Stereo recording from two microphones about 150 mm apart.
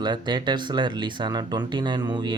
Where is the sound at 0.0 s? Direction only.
30° right (ahead or behind).